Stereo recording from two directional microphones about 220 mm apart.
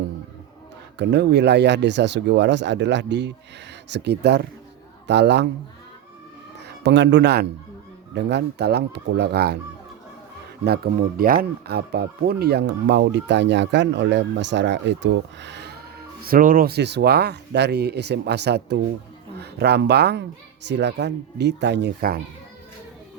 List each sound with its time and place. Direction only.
0.9 s speech: 50° right (ahead or behind)
6.7 s speech: 50° right (ahead or behind)
11.2 s speech: 45° right (ahead or behind)